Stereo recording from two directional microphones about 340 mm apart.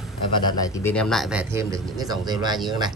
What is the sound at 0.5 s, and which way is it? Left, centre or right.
Speech, centre.